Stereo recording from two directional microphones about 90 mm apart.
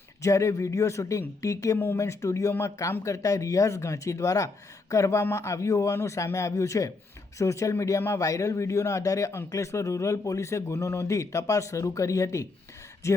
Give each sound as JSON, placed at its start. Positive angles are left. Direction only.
{"t": 0.2, "sound": "speech", "side_deg": 35}